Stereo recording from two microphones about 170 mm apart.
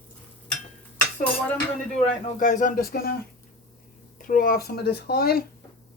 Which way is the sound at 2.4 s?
50° left (ahead or behind).